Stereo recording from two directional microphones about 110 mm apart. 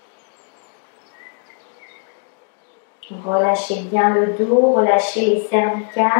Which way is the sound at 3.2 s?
20° left (ahead or behind).